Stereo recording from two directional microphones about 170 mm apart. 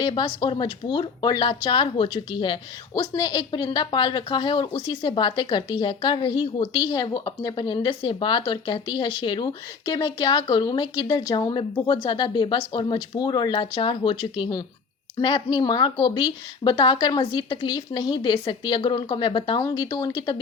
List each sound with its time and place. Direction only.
0.0 s a woman's voice: 30° left (ahead or behind)